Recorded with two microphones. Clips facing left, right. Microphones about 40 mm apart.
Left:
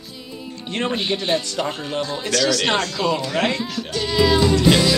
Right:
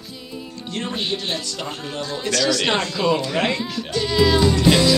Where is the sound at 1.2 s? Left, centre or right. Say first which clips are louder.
Left 5 dB; left.